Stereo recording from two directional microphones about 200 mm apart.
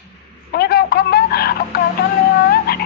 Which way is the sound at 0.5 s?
50° left (ahead or behind).